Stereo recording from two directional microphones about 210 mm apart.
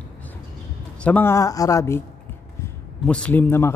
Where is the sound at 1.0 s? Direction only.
10° left (ahead or behind).